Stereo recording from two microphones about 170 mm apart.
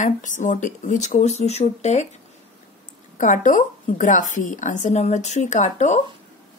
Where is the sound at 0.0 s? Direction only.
50° left (ahead or behind).